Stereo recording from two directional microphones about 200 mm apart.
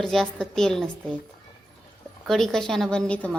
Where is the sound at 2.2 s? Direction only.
Centre (ahead or behind).